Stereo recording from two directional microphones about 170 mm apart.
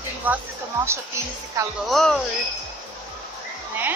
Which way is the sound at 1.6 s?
20° right (ahead or behind).